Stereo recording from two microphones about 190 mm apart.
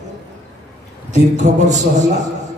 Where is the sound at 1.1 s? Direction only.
40° right (ahead or behind).